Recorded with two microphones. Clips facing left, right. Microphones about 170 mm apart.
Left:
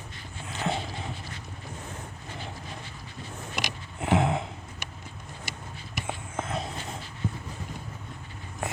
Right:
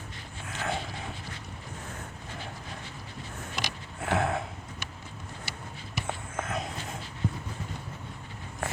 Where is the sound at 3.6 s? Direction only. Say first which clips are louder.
Left 3 dB; 15° left (ahead or behind).